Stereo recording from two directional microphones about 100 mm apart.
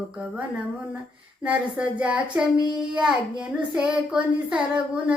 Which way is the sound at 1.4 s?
15° right (ahead or behind).